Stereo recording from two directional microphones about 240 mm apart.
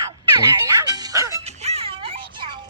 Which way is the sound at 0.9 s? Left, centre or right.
Centre.